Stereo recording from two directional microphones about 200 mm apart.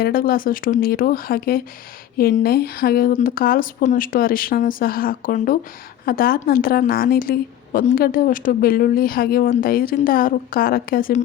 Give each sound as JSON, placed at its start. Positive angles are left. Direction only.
{"t": 0.0, "sound": "speech", "side_deg": 45}